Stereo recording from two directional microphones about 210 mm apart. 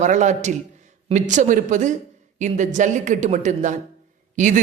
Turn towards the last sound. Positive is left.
turn(degrees=-35)  # may be behind; listen again after turning